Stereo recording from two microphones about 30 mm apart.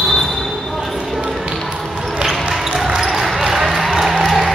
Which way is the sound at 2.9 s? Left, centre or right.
Centre.